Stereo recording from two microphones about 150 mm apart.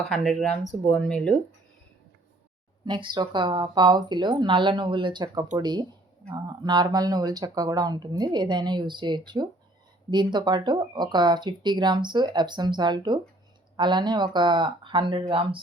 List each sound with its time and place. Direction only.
0.0 s speech: centre (ahead or behind)
2.8 s speech: 30° right (ahead or behind)